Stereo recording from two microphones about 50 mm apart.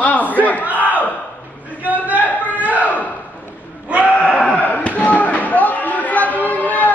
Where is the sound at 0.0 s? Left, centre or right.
Left.